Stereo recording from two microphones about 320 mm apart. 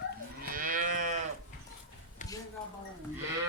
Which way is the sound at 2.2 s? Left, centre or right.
Left.